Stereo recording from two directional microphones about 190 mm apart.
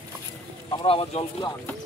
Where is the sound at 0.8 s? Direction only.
30° left (ahead or behind).